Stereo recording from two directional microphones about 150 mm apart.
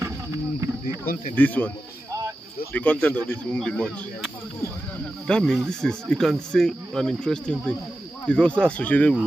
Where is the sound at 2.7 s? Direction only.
10° left (ahead or behind).